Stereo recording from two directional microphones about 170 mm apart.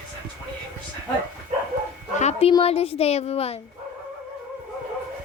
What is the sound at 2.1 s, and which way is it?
A child's voice, 40° left (ahead or behind).